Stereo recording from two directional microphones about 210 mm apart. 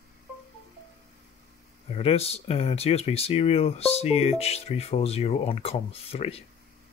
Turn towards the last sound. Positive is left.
turn(degrees=30)  # may be behind; listen again after turning